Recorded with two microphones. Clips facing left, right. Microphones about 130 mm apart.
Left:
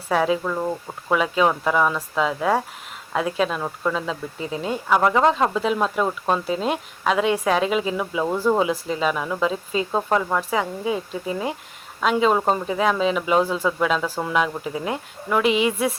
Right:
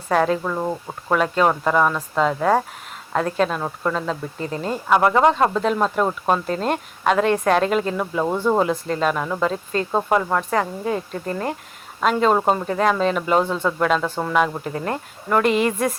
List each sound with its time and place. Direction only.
0.1 s speech: 5° left (ahead or behind)
0.4 s speech: 10° right (ahead or behind)
1.1 s speech: 5° left (ahead or behind)
6.1 s speech: 15° right (ahead or behind)
6.4 s speech: 5° left (ahead or behind)